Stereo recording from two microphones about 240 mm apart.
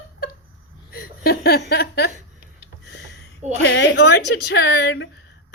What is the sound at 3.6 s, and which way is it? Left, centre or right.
Speech, left.